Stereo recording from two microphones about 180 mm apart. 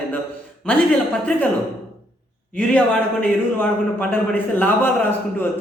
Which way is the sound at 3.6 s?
10° left (ahead or behind).